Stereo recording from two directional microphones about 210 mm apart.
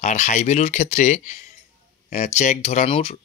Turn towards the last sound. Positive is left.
turn(degrees=30)  # may be behind; listen again after turning